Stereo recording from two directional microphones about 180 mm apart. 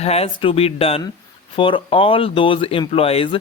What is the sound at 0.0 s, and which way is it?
Speech, 35° left (ahead or behind).